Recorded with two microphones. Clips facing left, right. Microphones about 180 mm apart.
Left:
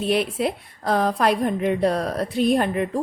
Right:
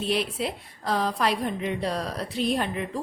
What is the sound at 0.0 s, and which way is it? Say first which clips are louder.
A woman's voice: left 5 dB; 55° left (ahead or behind).